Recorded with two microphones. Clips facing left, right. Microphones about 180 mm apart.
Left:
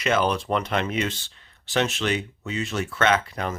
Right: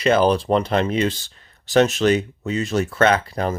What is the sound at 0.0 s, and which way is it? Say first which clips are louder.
Speech: right 6 dB; 35° right (ahead or behind).